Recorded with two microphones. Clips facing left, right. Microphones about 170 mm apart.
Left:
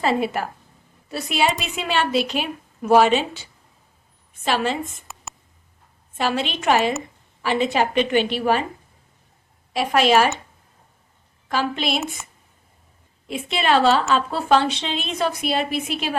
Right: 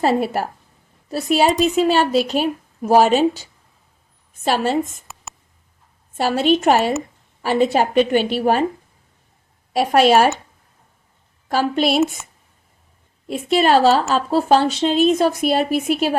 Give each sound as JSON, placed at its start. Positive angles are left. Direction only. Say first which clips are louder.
{"t": 0.0, "sound": "a woman's voice", "louder": "right 3 dB", "side_deg": -40}
{"t": 4.4, "sound": "a woman's voice", "louder": "right 4 dB", "side_deg": -45}
{"t": 5.1, "sound": "a sound", "louder": "even", "side_deg": 0}
{"t": 6.1, "sound": "a woman's voice", "louder": "right 7 dB", "side_deg": -45}
{"t": 9.7, "sound": "a woman's voice", "louder": "right 4 dB", "side_deg": -45}
{"t": 11.5, "sound": "a woman's voice", "louder": "right 5 dB", "side_deg": -45}
{"t": 13.2, "sound": "a woman's voice", "louder": "right 6 dB", "side_deg": -40}